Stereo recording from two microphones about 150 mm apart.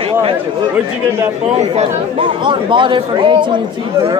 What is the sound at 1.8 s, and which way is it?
Speech, 35° right (ahead or behind).